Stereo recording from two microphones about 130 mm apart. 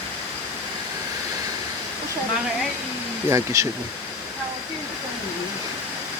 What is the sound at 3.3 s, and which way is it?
Speech, 25° right (ahead or behind).